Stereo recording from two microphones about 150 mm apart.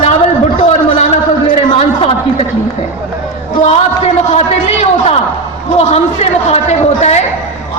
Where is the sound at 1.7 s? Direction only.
40° left (ahead or behind).